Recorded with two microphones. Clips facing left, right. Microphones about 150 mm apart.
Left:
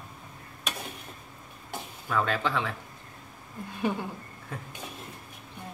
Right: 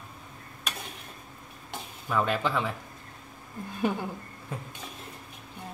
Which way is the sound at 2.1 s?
10° right (ahead or behind).